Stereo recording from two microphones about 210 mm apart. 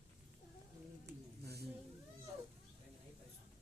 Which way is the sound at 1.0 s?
50° right (ahead or behind).